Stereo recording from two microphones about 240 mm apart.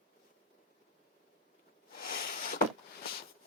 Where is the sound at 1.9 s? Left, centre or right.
Left.